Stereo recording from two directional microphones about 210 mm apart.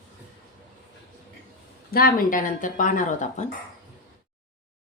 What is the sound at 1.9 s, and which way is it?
Speech, 45° left (ahead or behind).